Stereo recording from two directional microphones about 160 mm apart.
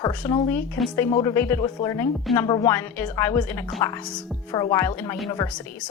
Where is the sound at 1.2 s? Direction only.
15° left (ahead or behind).